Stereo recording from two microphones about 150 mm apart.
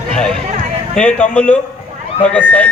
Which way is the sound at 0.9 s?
5° left (ahead or behind).